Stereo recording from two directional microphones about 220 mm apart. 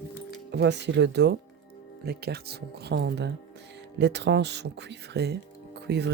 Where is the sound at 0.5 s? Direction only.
50° right (ahead or behind).